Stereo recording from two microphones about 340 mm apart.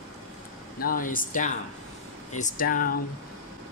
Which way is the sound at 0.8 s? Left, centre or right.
Left.